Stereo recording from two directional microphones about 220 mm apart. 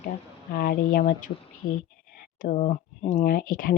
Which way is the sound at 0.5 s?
40° left (ahead or behind).